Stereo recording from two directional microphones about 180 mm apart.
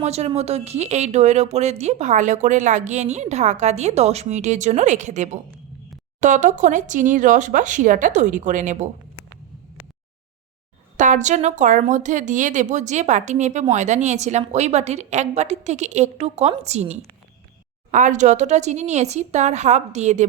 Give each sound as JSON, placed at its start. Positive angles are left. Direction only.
{"t": 0.0, "sound": "speech", "side_deg": -35}
{"t": 10.9, "sound": "speech", "side_deg": -45}